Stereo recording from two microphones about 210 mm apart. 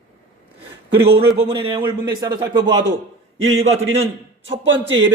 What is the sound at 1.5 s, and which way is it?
A man's voice, 25° right (ahead or behind).